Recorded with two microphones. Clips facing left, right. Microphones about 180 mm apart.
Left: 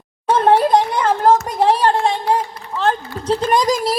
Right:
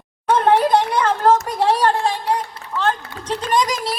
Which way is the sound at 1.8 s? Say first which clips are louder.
Left 2 dB; 30° left (ahead or behind).